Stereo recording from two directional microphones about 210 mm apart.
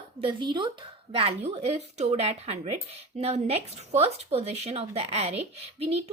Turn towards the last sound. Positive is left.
turn(degrees=-30)  # may be behind; listen again after turning